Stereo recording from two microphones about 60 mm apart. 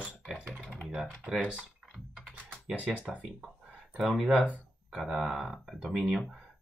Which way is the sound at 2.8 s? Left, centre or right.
Right.